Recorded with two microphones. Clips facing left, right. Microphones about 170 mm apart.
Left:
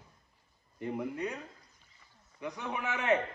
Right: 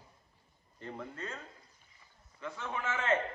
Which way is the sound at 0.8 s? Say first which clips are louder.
Left 8 dB; 15° left (ahead or behind).